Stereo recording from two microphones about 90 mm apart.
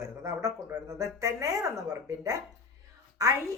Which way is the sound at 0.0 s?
35° right (ahead or behind).